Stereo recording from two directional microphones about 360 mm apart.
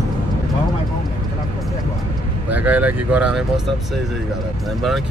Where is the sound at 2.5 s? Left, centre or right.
Centre.